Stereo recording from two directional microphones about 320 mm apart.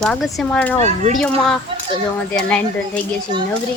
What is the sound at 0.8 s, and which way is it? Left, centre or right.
Speech, right.